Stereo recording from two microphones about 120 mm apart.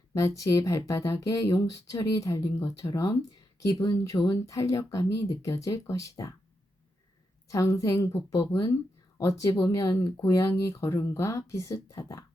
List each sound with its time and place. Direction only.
0.1 s speech: 25° left (ahead or behind)
7.4 s speech: 25° left (ahead or behind)